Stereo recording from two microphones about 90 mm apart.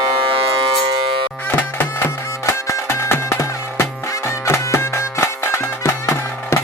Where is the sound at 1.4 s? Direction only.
20° left (ahead or behind).